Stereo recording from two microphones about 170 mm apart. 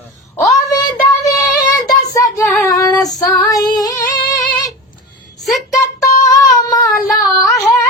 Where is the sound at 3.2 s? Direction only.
20° left (ahead or behind).